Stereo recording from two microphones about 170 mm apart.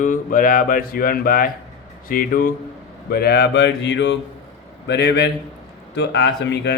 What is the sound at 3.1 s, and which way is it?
Speech, 70° left (ahead or behind).